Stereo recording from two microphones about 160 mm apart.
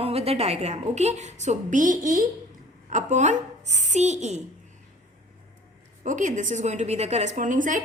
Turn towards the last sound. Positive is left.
turn(degrees=-55)  # may be behind; listen again after turning